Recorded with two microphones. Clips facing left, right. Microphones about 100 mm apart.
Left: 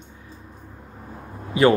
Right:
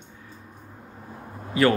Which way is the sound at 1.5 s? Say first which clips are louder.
Left 4 dB; 20° left (ahead or behind).